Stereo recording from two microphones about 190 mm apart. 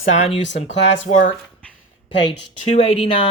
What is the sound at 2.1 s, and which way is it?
Speech, 70° left (ahead or behind).